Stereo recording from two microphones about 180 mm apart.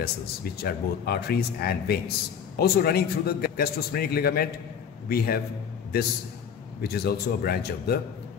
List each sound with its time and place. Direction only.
0.0 s a man's voice: 60° left (ahead or behind)
6.8 s speech: 60° left (ahead or behind)